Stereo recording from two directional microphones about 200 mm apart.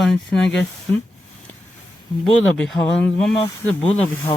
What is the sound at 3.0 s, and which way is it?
Speech, 5° left (ahead or behind).